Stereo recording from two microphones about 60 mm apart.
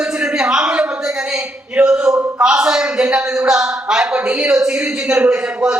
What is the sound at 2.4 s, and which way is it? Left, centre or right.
A man's voice, centre.